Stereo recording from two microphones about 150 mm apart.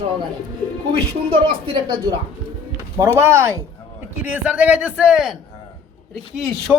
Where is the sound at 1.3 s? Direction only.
35° right (ahead or behind).